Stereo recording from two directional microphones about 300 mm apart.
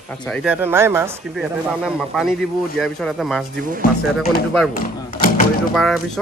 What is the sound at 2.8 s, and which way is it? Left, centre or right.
Speech, centre.